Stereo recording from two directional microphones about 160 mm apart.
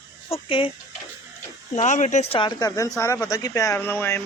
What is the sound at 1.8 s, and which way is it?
Speech, 50° left (ahead or behind).